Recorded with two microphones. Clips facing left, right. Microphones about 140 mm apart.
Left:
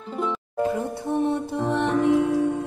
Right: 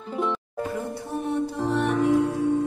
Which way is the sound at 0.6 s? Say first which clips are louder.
Left 5 dB; 20° left (ahead or behind).